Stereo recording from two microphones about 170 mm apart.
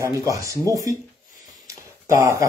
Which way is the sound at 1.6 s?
20° right (ahead or behind).